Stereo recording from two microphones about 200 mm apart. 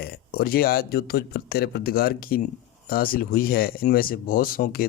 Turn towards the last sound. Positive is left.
turn(degrees=45)  # may be behind; listen again after turning